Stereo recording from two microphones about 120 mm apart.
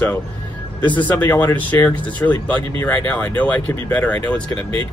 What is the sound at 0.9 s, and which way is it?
Speech, 15° left (ahead or behind).